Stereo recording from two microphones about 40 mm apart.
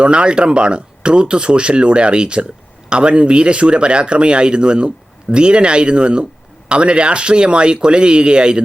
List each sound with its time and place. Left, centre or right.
0.0 s speech: right